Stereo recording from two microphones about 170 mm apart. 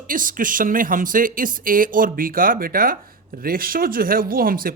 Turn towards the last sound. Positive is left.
turn(degrees=-60)  # may be behind; listen again after turning